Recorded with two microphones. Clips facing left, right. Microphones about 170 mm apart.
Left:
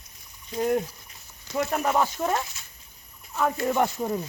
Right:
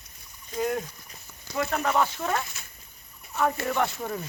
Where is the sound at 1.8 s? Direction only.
15° left (ahead or behind).